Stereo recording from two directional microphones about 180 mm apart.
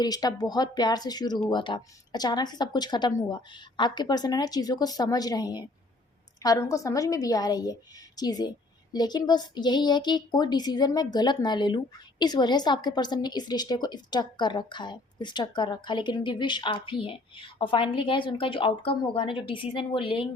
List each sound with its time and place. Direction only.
0.0 s a woman's voice: 20° left (ahead or behind)